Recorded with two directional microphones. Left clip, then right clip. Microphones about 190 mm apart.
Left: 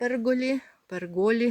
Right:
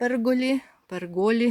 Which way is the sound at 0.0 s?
20° right (ahead or behind).